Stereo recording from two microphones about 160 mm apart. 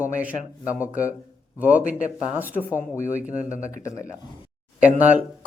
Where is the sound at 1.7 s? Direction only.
55° left (ahead or behind).